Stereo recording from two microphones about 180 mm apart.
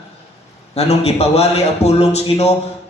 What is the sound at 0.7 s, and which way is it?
A man's voice, 35° left (ahead or behind).